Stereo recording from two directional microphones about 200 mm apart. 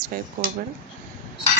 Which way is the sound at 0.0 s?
45° right (ahead or behind).